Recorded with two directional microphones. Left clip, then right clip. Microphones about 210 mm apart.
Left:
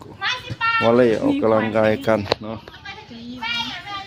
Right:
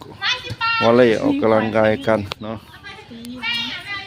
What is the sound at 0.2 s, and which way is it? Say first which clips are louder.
Children playing: right 2 dB; 35° left (ahead or behind).